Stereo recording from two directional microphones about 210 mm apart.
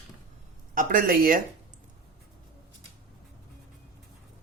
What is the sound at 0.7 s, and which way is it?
Speech, 45° right (ahead or behind).